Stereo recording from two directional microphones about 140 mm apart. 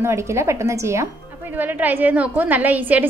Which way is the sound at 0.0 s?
20° right (ahead or behind).